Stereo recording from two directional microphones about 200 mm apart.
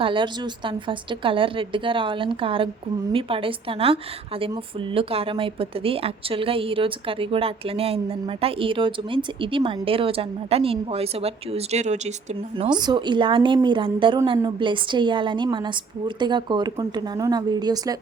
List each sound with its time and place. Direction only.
0.0 s speech: 25° right (ahead or behind)